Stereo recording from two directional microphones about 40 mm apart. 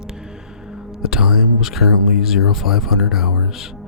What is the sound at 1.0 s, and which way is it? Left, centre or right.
A man's voice, centre.